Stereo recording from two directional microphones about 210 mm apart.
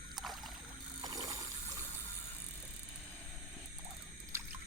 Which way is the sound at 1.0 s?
15° right (ahead or behind).